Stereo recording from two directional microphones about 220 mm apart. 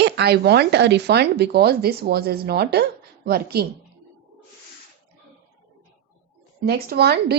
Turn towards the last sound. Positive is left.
turn(degrees=-45)  # may be behind; listen again after turning